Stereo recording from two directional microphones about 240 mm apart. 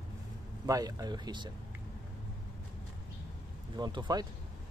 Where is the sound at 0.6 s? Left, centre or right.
Centre.